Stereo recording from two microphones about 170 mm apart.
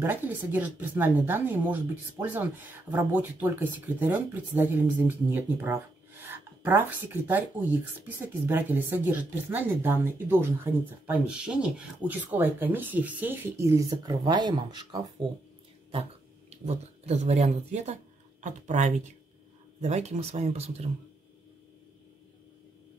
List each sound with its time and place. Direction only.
0.0 s speech: 10° right (ahead or behind)
15.9 s speech: 40° right (ahead or behind)